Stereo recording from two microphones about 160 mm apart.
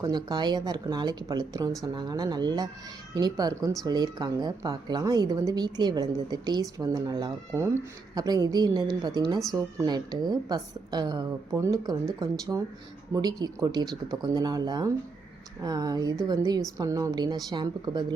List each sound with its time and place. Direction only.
0.0 s a woman's voice: 25° right (ahead or behind)